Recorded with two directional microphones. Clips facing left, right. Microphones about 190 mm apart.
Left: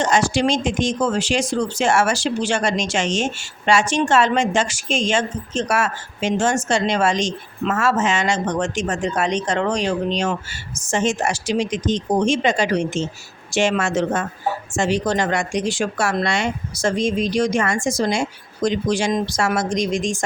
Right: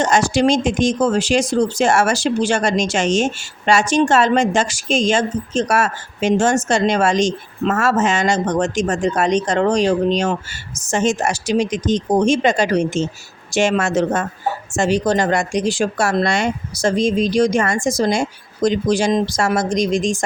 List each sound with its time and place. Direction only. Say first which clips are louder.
0.0 s a woman's voice: right 3 dB; 45° right (ahead or behind)